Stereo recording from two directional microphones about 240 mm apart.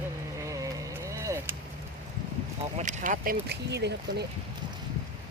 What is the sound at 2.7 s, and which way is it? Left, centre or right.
Speech, right.